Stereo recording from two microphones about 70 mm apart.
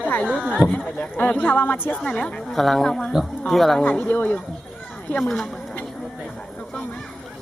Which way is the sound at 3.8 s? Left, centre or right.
Left.